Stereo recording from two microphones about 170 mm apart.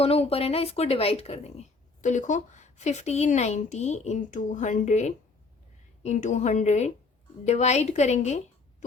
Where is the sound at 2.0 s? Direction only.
45° left (ahead or behind).